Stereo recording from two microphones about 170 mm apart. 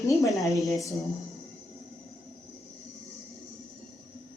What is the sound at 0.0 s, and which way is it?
Speech, 20° left (ahead or behind).